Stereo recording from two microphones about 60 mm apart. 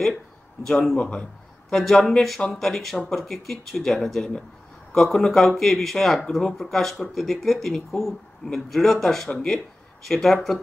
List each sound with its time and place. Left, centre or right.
0.7 s speech: centre